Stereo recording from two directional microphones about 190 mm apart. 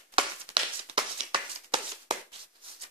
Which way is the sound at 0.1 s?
25° right (ahead or behind).